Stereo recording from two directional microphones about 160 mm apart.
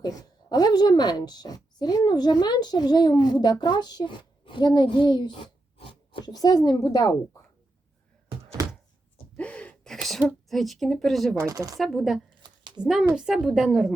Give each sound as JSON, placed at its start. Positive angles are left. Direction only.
{"t": 0.0, "sound": "a woman's voice", "side_deg": 25}
{"t": 6.3, "sound": "a woman's voice", "side_deg": 25}
{"t": 9.4, "sound": "gasp", "side_deg": 5}
{"t": 10.1, "sound": "speech", "side_deg": 0}
{"t": 11.3, "sound": "speech", "side_deg": -20}
{"t": 11.8, "sound": "speech", "side_deg": 0}